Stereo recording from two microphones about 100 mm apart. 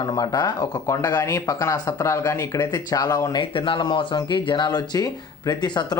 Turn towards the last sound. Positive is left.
turn(degrees=50)  # may be behind; listen again after turning